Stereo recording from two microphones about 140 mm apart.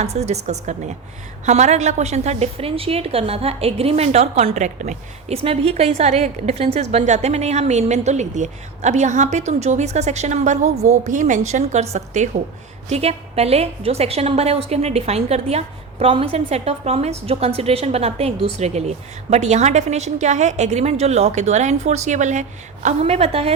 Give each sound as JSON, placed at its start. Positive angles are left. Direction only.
{"t": 0.0, "sound": "a woman's voice", "side_deg": -50}
{"t": 5.4, "sound": "a woman's voice", "side_deg": -45}
{"t": 12.9, "sound": "a woman's voice", "side_deg": -45}